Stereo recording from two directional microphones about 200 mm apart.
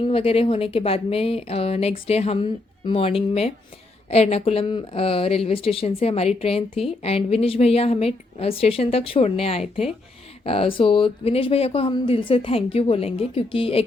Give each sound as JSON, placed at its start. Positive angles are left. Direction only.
{"t": 0.0, "sound": "speech", "side_deg": 25}